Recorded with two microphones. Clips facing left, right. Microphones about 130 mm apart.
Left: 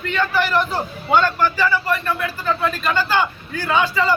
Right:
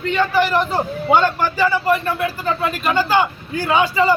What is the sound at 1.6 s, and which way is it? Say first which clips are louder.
A man's voice: right 3 dB; 20° right (ahead or behind).